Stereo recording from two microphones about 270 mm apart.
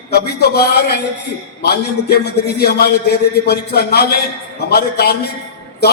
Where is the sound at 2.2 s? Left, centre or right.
Left.